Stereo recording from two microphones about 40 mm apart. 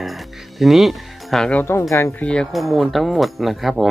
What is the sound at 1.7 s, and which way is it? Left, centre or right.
Speech, left.